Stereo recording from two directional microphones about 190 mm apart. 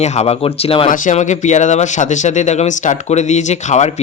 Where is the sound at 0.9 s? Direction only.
40° left (ahead or behind).